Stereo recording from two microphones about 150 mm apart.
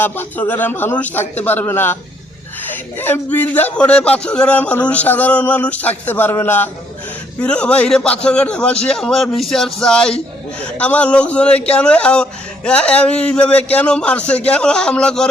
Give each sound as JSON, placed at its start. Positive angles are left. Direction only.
{"t": 0.0, "sound": "speech", "side_deg": 15}
{"t": 3.0, "sound": "speech", "side_deg": 10}